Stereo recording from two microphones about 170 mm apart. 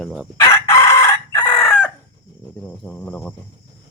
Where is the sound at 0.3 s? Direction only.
15° left (ahead or behind).